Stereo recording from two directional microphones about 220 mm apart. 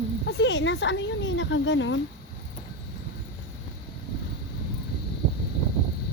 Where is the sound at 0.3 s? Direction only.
50° left (ahead or behind).